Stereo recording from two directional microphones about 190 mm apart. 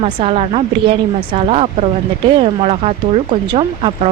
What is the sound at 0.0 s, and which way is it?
Speech, 30° right (ahead or behind).